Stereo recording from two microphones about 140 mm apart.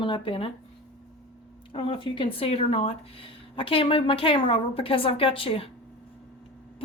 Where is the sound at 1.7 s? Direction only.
40° left (ahead or behind).